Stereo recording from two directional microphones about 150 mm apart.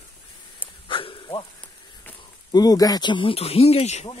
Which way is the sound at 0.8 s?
35° left (ahead or behind).